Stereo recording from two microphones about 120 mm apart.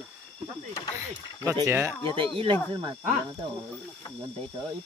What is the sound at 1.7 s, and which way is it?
Speech, 15° right (ahead or behind).